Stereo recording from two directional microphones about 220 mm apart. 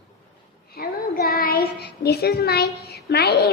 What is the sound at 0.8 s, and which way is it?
A child's voice, 45° left (ahead or behind).